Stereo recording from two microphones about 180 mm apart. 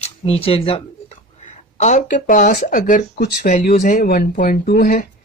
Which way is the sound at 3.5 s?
45° left (ahead or behind).